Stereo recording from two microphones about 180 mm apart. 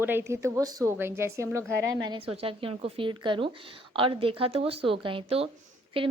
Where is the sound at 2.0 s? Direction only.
30° right (ahead or behind).